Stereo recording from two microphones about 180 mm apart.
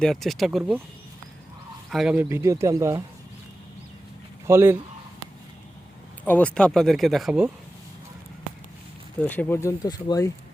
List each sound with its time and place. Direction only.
0.0 s speech: centre (ahead or behind)
1.9 s speech: 5° right (ahead or behind)
4.4 s speech: 15° right (ahead or behind)
6.2 s speech: 10° left (ahead or behind)
9.2 s speech: 10° left (ahead or behind)